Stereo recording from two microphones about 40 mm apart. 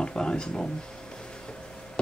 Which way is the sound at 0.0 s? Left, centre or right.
Left.